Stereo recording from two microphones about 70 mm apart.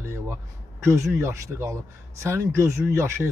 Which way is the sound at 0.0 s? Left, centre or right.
Right.